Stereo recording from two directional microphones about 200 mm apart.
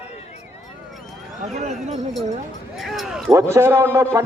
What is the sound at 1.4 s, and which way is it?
Speech, 35° right (ahead or behind).